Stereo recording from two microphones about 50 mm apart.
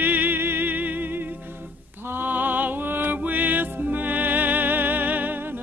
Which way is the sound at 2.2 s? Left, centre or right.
Right.